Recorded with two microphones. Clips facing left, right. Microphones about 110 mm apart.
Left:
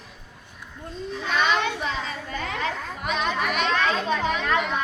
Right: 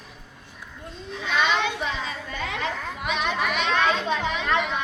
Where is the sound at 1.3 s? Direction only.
45° left (ahead or behind).